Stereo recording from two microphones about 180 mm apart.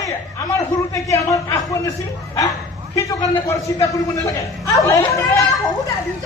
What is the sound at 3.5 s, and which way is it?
A man's voice, 15° left (ahead or behind).